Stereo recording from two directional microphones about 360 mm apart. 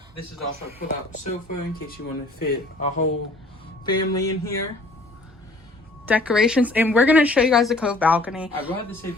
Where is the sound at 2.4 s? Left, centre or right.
Left.